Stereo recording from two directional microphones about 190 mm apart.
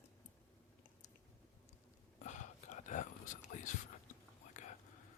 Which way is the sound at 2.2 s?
40° left (ahead or behind).